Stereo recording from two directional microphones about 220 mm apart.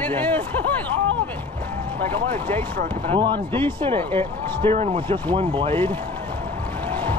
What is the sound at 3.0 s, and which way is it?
Speech, 20° right (ahead or behind).